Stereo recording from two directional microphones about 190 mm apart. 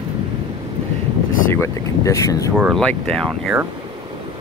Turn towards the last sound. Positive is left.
turn(degrees=0)  # may be behind; listen again after turning